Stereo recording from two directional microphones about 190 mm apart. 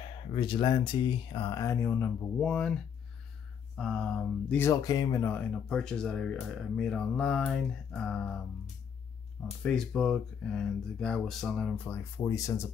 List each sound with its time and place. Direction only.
0.3 s speech: 25° left (ahead or behind); by 8.4 s 5° left (ahead or behind)
9.6 s speech: 5° left (ahead or behind)
12.2 s speech: 15° left (ahead or behind)